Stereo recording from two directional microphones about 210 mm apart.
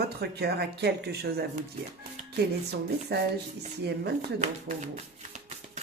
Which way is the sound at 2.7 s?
50° right (ahead or behind).